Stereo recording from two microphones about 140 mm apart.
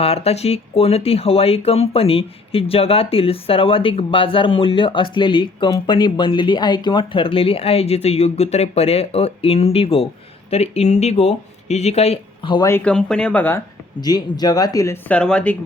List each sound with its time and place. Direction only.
0.0 s speech: 45° left (ahead or behind)
12.8 s speech: 5° left (ahead or behind)
14.0 s speech: 30° left (ahead or behind)
15.1 s speech: 5° left (ahead or behind)